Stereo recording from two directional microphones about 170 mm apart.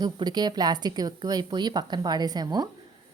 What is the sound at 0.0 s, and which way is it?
A woman's voice, 25° right (ahead or behind).